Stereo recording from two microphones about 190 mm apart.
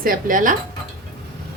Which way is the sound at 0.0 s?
45° right (ahead or behind).